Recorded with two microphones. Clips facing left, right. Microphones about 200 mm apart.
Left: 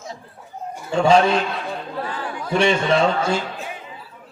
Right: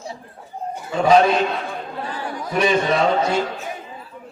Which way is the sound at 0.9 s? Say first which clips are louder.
Even; 30° left (ahead or behind).